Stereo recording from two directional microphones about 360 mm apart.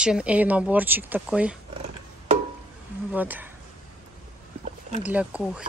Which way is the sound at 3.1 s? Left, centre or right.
Centre.